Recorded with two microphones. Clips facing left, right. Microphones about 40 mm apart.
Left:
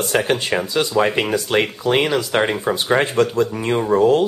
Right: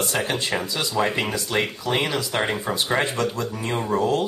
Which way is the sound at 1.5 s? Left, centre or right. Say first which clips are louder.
Left 5 dB; left.